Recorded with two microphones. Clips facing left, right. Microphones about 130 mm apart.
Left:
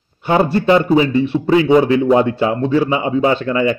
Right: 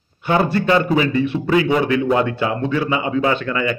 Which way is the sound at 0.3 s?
25° left (ahead or behind).